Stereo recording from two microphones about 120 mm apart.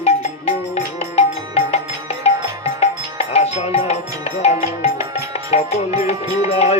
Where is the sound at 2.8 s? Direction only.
60° left (ahead or behind).